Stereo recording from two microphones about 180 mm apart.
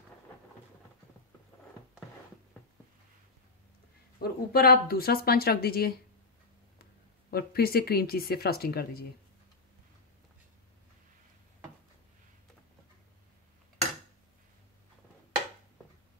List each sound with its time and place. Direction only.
4.2 s speech: 60° left (ahead or behind)
7.2 s speech: 60° left (ahead or behind)